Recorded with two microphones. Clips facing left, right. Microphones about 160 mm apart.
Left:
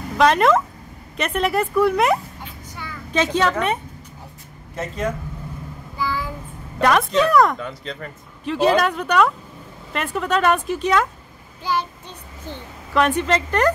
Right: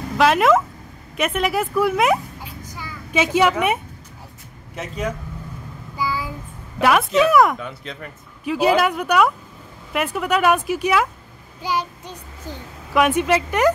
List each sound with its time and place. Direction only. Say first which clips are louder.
0.2 s a woman's voice: even; 5° right (ahead or behind)
5.9 s child singing: even; 10° right (ahead or behind)
6.8 s a woman's voice: right 1 dB; 5° right (ahead or behind)
12.9 s speech: right 1 dB; 10° right (ahead or behind)